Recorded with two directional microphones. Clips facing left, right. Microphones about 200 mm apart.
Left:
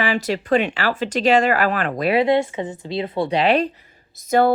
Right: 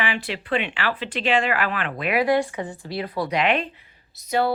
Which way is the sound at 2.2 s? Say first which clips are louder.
Even; 25° left (ahead or behind).